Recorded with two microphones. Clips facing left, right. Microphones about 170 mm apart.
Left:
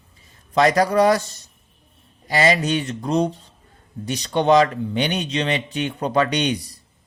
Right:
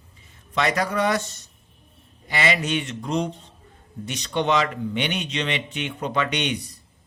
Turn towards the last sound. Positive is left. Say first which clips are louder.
# left 4 dB
turn(degrees=35)  # may be behind; listen again after turning